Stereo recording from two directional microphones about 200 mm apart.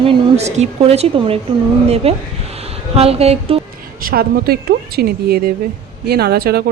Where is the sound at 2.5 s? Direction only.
30° right (ahead or behind).